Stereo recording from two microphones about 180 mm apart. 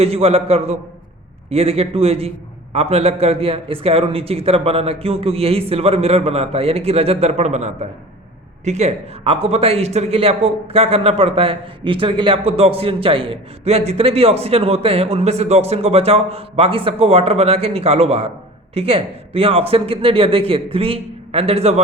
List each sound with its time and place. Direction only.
0.0 s speech: 35° right (ahead or behind)